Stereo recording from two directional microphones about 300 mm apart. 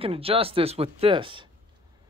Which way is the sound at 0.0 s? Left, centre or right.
Centre.